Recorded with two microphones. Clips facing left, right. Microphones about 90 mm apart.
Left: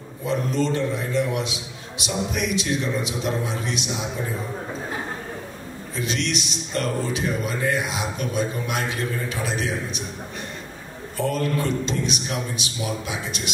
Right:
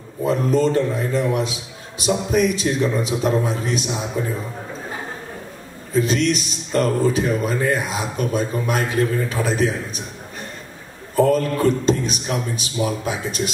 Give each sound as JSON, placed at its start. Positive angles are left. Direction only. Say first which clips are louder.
{"t": 0.2, "sound": "a man's voice", "louder": "right 6 dB", "side_deg": -40}
{"t": 5.9, "sound": "a man's voice", "louder": "right 8 dB", "side_deg": -40}
{"t": 11.1, "sound": "a man's voice", "louder": "right 7 dB", "side_deg": -40}